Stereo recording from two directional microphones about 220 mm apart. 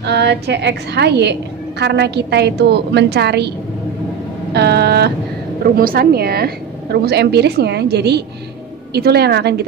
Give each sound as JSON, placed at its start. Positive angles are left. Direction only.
{"t": 0.0, "sound": "a woman's voice", "side_deg": -50}
{"t": 4.6, "sound": "a woman's voice", "side_deg": -50}